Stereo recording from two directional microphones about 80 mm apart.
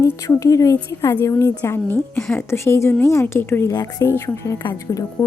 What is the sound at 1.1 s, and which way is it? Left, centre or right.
A woman's voice, left.